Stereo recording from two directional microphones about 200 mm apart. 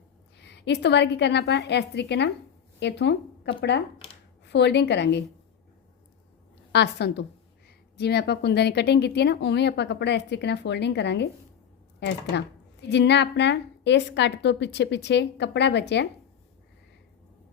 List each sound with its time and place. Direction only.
0.3 s a woman's voice: 60° left (ahead or behind)
3.9 s a sound: 30° left (ahead or behind)
4.4 s a woman's voice: 60° left (ahead or behind)
6.7 s a woman's voice: 55° left (ahead or behind)